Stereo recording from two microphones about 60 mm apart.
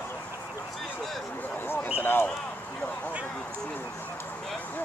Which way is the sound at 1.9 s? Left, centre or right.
Left.